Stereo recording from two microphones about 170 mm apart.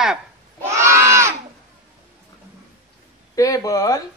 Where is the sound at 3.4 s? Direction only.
20° left (ahead or behind).